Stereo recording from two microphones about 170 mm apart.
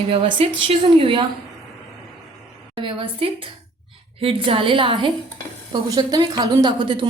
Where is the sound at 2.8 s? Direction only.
30° right (ahead or behind).